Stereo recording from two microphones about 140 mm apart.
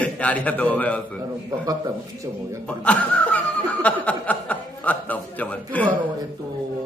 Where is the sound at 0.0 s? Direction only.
10° left (ahead or behind).